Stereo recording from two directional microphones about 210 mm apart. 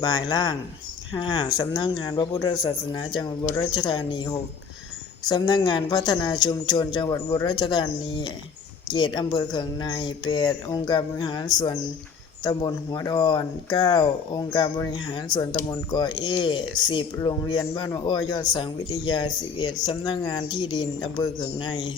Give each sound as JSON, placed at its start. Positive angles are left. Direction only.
{"t": 0.0, "sound": "speech", "side_deg": 20}